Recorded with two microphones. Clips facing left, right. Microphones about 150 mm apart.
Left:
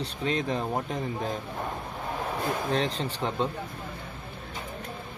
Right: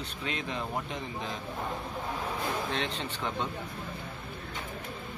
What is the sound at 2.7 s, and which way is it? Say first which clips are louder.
Speech: left 6 dB; 40° left (ahead or behind).